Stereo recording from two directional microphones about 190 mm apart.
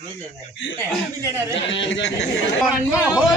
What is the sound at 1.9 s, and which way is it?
Speech, 75° left (ahead or behind).